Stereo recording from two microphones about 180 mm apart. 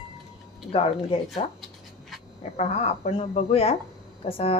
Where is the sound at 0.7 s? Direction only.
30° left (ahead or behind).